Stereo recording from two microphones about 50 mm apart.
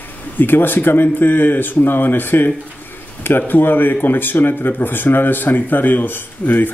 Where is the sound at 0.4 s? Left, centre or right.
Left.